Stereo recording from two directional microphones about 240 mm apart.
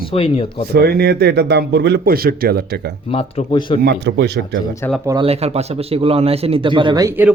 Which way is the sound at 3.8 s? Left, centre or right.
Right.